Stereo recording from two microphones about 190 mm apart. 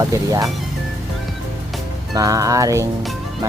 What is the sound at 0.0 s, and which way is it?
Speech, 20° right (ahead or behind).